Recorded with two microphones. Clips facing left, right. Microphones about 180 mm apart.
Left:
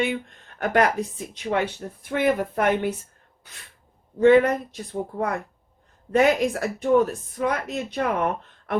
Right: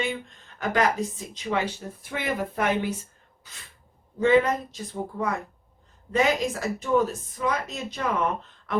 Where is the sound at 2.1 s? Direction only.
55° left (ahead or behind).